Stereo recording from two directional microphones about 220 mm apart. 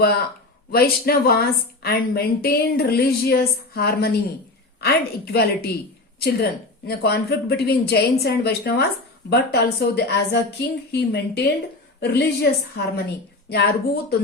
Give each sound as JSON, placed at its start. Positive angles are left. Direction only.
{"t": 0.7, "sound": "speech", "side_deg": 45}